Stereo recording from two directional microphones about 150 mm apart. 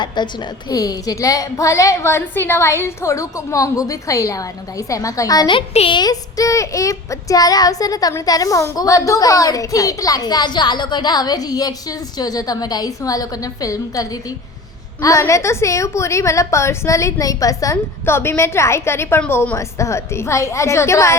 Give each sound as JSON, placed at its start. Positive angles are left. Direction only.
{"t": 0.0, "sound": "speech", "side_deg": 30}
{"t": 6.0, "sound": "speech", "side_deg": 25}